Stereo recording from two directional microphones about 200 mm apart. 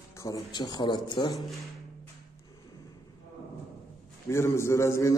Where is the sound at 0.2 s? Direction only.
20° left (ahead or behind).